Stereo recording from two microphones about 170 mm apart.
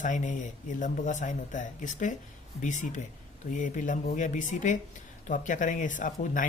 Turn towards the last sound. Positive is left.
turn(degrees=50)  # may be behind; listen again after turning